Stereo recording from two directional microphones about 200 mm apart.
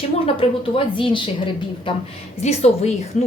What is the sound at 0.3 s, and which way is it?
A woman's voice, 25° left (ahead or behind).